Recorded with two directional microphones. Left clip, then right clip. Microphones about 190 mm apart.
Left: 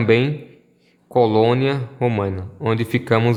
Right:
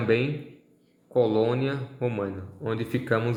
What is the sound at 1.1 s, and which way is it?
A man's voice, 35° left (ahead or behind).